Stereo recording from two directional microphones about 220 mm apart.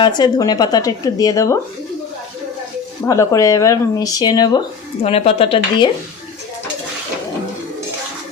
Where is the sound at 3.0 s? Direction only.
15° left (ahead or behind).